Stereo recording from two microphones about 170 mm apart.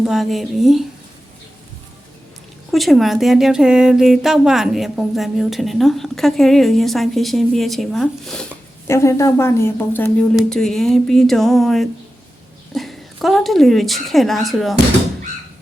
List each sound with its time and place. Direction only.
0.0 s speech: centre (ahead or behind)
2.7 s speech: centre (ahead or behind)
8.9 s a woman's voice: 15° left (ahead or behind); by 14.8 s centre (ahead or behind)